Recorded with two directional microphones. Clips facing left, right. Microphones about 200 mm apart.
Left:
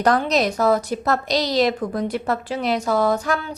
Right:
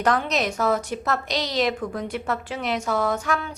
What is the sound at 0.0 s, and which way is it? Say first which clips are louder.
Speech: left 4 dB; 35° left (ahead or behind).